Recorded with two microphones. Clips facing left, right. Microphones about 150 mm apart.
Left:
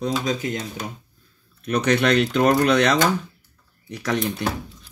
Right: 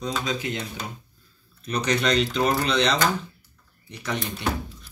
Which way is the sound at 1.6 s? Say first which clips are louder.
Left 5 dB; 60° left (ahead or behind).